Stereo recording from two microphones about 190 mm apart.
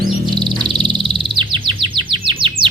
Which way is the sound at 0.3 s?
25° right (ahead or behind).